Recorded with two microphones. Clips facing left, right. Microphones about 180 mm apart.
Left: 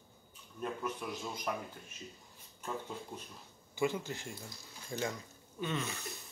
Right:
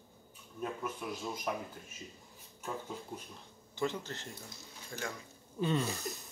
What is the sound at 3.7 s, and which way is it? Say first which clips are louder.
Speech: left 2 dB; 10° left (ahead or behind).